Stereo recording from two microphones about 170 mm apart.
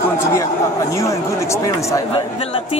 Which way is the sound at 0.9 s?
15° left (ahead or behind).